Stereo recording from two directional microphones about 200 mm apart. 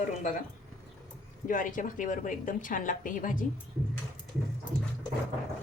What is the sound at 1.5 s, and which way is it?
Speech, 40° left (ahead or behind).